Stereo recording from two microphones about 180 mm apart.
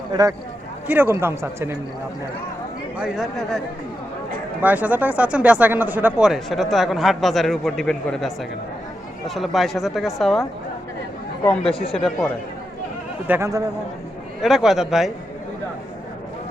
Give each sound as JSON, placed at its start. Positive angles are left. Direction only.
{"t": 0.1, "sound": "speech", "side_deg": -20}
{"t": 3.0, "sound": "speech", "side_deg": -5}
{"t": 4.6, "sound": "speech", "side_deg": -10}
{"t": 11.4, "sound": "speech", "side_deg": 5}
{"t": 13.2, "sound": "speech", "side_deg": -15}
{"t": 14.4, "sound": "speech", "side_deg": 0}